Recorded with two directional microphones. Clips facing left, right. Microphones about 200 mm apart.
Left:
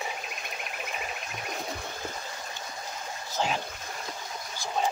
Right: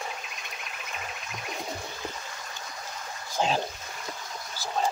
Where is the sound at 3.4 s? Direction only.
15° right (ahead or behind).